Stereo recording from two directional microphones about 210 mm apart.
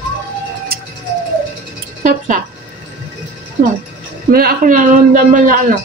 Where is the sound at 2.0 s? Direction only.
35° right (ahead or behind).